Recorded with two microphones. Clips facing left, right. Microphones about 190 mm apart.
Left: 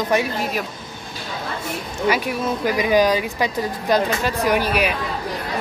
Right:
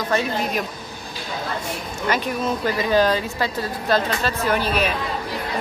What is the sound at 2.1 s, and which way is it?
Speech, 10° left (ahead or behind).